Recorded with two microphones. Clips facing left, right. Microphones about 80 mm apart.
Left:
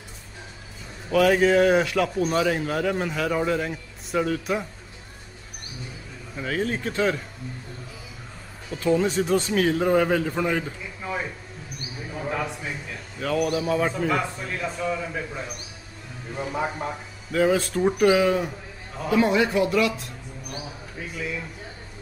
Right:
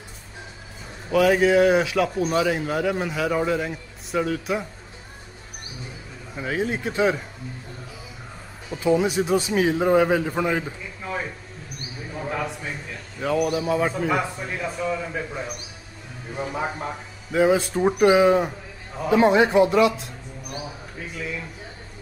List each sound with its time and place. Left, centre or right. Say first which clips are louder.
1.1 s a man's voice: right 1 dB; centre
6.3 s a man's voice: right 1 dB; centre
8.6 s a man's voice: right 1 dB; centre
12.1 s a sound: even; centre
13.2 s a man's voice: right 1 dB; centre
17.3 s a man's voice: right 2 dB; centre
20.0 s mouse: right 1 dB; centre